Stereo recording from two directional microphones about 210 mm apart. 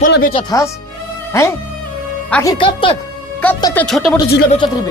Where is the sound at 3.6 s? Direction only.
10° left (ahead or behind).